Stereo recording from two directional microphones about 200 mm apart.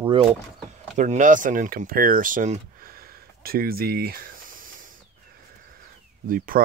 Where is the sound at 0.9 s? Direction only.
40° right (ahead or behind).